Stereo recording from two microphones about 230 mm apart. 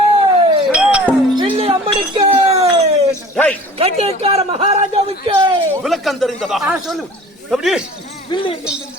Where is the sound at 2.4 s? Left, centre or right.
Right.